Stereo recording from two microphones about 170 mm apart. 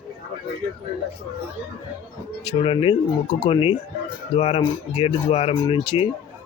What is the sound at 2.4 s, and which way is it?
Speech, 30° left (ahead or behind).